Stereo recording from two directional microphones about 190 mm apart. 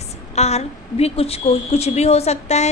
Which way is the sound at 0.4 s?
35° left (ahead or behind).